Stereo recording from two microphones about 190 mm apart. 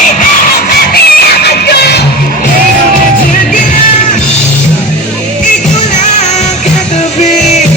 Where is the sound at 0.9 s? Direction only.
55° left (ahead or behind).